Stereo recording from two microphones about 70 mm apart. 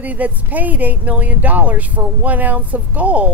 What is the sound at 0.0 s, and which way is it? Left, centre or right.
Speech, right.